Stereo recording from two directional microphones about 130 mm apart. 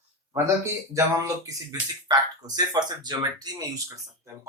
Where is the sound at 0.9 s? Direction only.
25° right (ahead or behind).